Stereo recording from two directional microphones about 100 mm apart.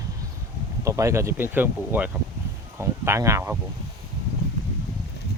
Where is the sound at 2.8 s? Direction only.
30° right (ahead or behind).